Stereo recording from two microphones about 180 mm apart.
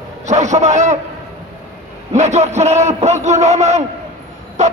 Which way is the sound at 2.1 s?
40° right (ahead or behind).